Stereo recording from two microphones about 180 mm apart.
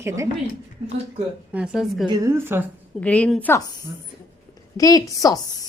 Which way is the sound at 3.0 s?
5° left (ahead or behind).